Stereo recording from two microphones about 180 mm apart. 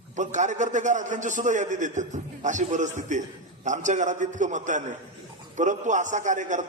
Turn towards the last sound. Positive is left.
turn(degrees=-45)  # may be behind; listen again after turning